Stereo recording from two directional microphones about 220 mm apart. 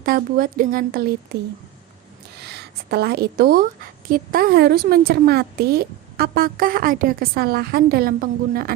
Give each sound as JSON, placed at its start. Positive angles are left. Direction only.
{"t": 0.0, "sound": "a woman's voice", "side_deg": -40}
{"t": 2.5, "sound": "a woman's voice", "side_deg": -45}